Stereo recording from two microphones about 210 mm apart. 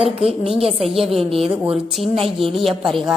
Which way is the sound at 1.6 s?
Centre (ahead or behind).